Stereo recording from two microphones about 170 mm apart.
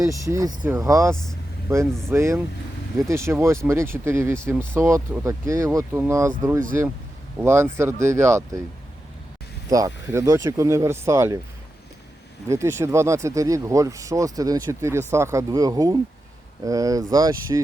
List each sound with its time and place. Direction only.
0.0 s speech: 20° right (ahead or behind)
1.1 s speech: 5° left (ahead or behind)
1.7 s speech: 15° right (ahead or behind)
9.6 s speech: 20° right (ahead or behind)
12.5 s speech: 15° right (ahead or behind)